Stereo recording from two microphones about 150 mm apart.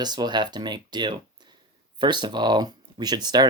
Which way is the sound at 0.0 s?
30° right (ahead or behind).